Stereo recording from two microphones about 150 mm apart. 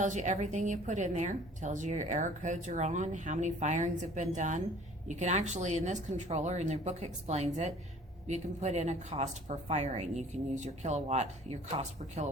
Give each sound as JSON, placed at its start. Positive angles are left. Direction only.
{"t": 0.0, "sound": "a woman's voice", "side_deg": -55}